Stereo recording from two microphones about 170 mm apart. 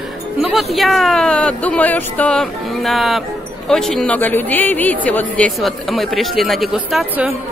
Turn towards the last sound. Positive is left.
turn(degrees=-5)  # may be behind; listen again after turning